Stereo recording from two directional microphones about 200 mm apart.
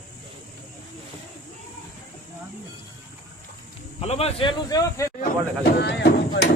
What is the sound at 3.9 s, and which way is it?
Speech, 30° left (ahead or behind).